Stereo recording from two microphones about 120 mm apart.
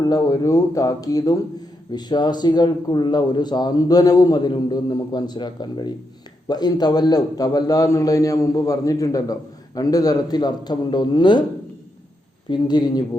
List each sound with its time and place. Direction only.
0.0 s a man's voice: 35° left (ahead or behind)
12.5 s a man's voice: 35° left (ahead or behind)